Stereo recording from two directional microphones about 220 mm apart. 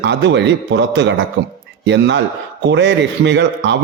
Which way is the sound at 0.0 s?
55° right (ahead or behind).